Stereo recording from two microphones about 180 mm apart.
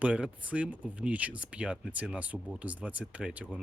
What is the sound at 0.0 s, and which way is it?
Speech, 5° right (ahead or behind).